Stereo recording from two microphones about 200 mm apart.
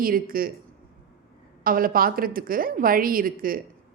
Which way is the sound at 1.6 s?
45° right (ahead or behind).